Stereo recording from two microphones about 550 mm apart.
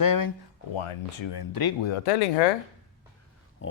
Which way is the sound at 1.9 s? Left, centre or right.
Left.